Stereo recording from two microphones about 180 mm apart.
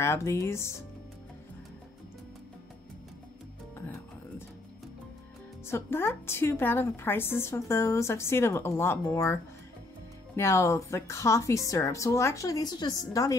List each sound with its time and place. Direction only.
0.0 s a woman's voice: 15° left (ahead or behind)
5.7 s a woman's voice: 15° left (ahead or behind)